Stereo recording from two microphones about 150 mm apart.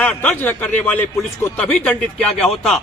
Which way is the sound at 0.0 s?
10° left (ahead or behind).